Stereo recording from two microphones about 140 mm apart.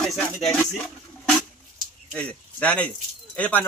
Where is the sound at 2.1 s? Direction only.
10° left (ahead or behind).